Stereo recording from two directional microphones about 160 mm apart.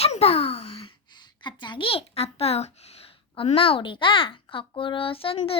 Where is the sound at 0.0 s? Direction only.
40° left (ahead or behind).